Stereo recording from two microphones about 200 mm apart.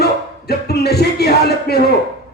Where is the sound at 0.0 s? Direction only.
55° left (ahead or behind).